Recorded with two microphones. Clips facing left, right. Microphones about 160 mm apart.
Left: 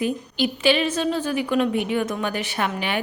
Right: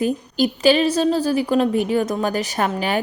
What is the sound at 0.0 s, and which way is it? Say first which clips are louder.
A woman's voice: right 4 dB; 40° right (ahead or behind).